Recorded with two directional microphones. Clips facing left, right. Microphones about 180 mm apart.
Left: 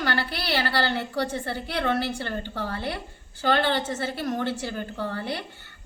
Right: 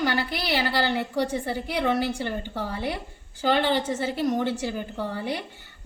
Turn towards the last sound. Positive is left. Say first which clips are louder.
# right 2 dB
turn(degrees=-15)  # may be behind; listen again after turning